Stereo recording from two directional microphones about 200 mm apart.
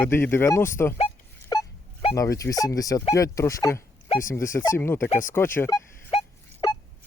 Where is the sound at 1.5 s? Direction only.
20° left (ahead or behind).